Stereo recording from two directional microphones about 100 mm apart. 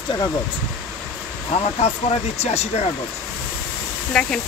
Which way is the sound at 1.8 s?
90° left.